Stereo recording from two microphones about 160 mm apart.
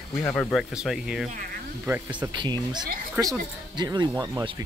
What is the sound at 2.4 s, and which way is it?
Speech, 30° right (ahead or behind).